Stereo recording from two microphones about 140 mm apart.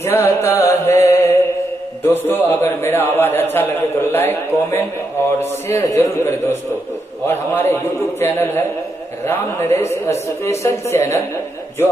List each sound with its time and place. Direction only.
0.0 s music: 15° left (ahead or behind)
2.0 s a man's voice: 15° left (ahead or behind)